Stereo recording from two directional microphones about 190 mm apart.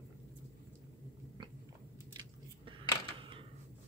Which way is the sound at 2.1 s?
25° right (ahead or behind).